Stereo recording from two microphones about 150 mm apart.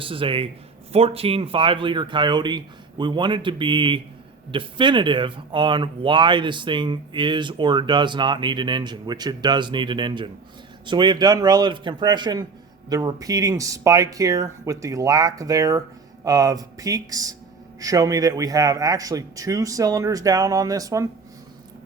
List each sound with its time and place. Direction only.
0.0 s a man's voice: 35° right (ahead or behind)